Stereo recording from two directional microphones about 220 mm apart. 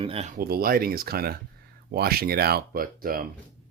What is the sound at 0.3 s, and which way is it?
Speech, 45° right (ahead or behind).